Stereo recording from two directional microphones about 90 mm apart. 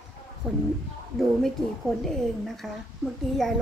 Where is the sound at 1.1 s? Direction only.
Centre (ahead or behind).